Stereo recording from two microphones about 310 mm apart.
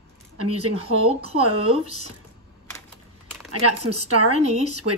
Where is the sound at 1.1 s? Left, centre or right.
Centre.